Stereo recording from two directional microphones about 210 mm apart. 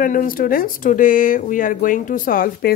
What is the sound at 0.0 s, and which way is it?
Speech, 40° left (ahead or behind).